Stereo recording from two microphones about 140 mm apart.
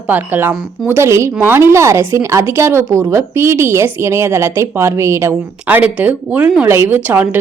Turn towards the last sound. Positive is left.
turn(degrees=-15)  # may be behind; listen again after turning